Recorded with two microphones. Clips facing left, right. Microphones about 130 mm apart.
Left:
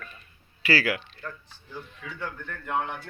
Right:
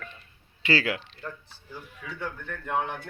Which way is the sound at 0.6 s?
25° right (ahead or behind).